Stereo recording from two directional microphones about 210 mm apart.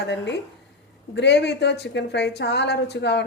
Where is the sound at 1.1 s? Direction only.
55° left (ahead or behind).